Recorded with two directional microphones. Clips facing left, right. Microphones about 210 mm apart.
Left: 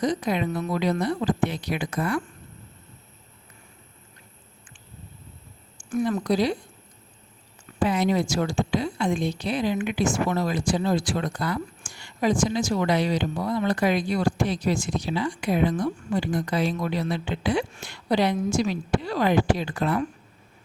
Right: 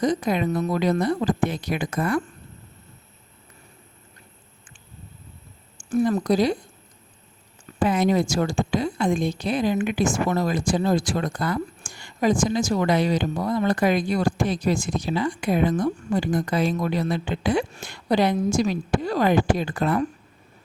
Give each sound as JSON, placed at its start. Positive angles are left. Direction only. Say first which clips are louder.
{"t": 0.0, "sound": "a woman's voice", "louder": "right 2 dB", "side_deg": -50}
{"t": 5.7, "sound": "speech", "louder": "right 4 dB", "side_deg": -40}
{"t": 7.8, "sound": "a woman's voice", "louder": "right 2 dB", "side_deg": -50}